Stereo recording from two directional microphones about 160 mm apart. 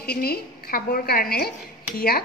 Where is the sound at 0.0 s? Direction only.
75° left (ahead or behind).